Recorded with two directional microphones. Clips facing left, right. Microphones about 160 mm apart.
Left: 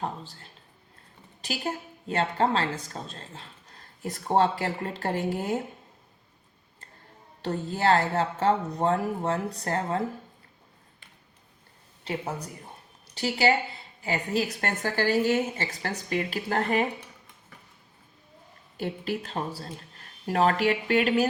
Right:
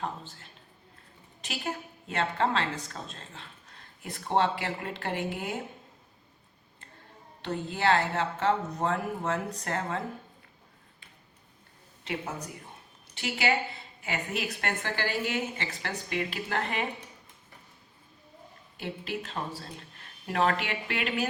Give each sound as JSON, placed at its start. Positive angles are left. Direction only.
{"t": 0.0, "sound": "a woman's voice", "side_deg": 35}
{"t": 7.4, "sound": "a woman's voice", "side_deg": 40}
{"t": 13.1, "sound": "a woman's voice", "side_deg": 35}
{"t": 18.8, "sound": "a woman's voice", "side_deg": 40}